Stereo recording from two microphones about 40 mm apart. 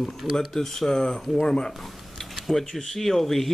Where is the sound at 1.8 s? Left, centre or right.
Centre.